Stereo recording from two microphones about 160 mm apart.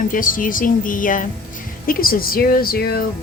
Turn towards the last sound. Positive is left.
turn(degrees=75)  # may be behind; listen again after turning